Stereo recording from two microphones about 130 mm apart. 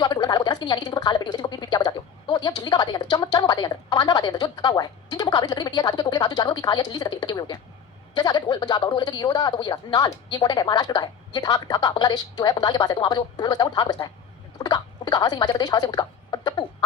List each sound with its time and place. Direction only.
0.0 s a woman's voice: 30° left (ahead or behind)